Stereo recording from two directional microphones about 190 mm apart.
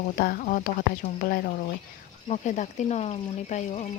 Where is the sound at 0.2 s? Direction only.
50° left (ahead or behind).